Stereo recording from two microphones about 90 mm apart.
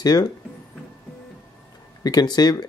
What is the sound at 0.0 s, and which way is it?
Speech, 45° left (ahead or behind).